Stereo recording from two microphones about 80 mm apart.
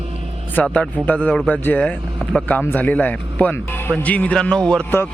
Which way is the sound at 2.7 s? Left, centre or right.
Centre.